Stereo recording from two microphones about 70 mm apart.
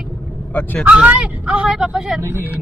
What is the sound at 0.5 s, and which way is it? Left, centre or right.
Speech, centre.